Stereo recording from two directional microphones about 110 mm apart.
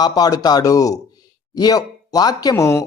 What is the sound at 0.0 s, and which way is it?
A man's voice, 40° left (ahead or behind).